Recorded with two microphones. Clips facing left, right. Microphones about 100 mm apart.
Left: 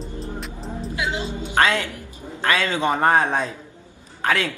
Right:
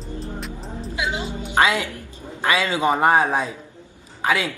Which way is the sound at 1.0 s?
20° right (ahead or behind).